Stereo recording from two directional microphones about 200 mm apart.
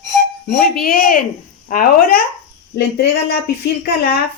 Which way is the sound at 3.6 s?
50° left (ahead or behind).